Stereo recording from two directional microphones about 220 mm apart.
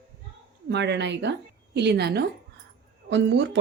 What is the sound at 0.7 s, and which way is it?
A woman's voice, 50° right (ahead or behind).